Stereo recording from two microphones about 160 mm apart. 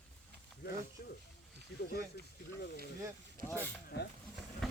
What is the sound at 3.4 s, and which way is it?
Speech, 15° left (ahead or behind).